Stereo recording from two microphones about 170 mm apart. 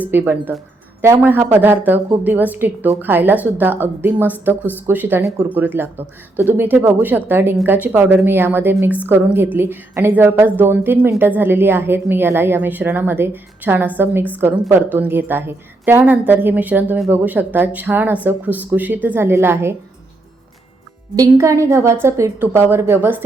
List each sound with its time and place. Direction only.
0.0 s a woman's voice: 10° right (ahead or behind)
21.2 s a woman's voice: 20° right (ahead or behind)